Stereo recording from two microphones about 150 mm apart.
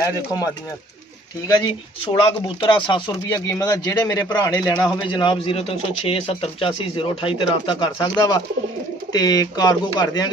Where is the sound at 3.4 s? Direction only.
20° left (ahead or behind).